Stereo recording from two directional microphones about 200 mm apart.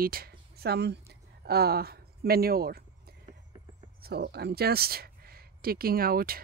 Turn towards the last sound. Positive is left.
turn(degrees=-50)  # may be behind; listen again after turning